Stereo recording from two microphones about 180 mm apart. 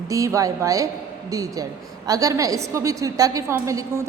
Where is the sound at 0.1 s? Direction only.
15° right (ahead or behind).